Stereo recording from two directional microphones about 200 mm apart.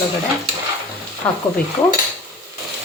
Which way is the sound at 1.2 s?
10° left (ahead or behind).